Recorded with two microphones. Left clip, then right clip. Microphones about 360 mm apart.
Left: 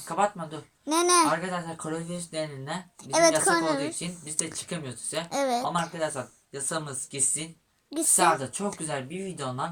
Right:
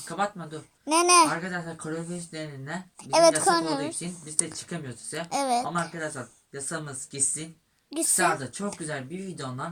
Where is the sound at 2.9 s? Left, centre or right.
Centre.